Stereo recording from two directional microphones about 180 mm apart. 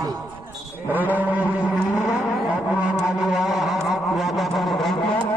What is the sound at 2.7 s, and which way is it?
Vehicle, 5° right (ahead or behind).